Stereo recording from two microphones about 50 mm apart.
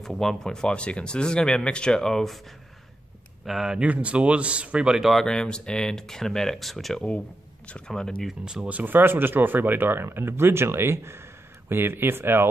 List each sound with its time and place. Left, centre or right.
0.0 s speech: centre
3.4 s speech: centre
3.8 s a man's voice: right
5.2 s speech: centre
8.6 s speech: right
8.9 s speech: right